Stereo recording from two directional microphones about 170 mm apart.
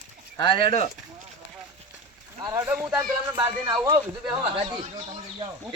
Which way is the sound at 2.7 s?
5° right (ahead or behind).